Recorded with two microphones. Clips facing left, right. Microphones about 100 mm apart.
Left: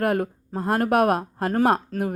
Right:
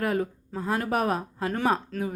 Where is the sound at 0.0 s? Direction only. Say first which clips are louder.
Left 4 dB; 55° left (ahead or behind).